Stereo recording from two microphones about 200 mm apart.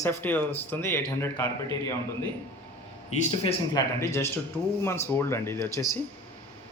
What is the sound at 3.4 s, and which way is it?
Speech, 25° left (ahead or behind).